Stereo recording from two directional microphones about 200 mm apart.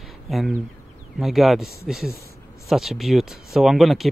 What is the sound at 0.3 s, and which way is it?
Speech, centre (ahead or behind).